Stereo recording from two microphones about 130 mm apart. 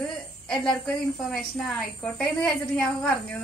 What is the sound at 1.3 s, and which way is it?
A woman's voice, 5° left (ahead or behind).